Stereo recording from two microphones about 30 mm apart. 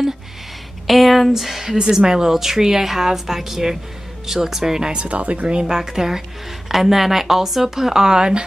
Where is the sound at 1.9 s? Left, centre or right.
Right.